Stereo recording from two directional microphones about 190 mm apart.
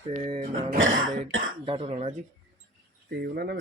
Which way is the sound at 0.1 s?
30° right (ahead or behind).